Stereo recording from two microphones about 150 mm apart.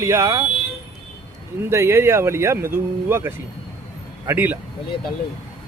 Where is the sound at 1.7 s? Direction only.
20° right (ahead or behind).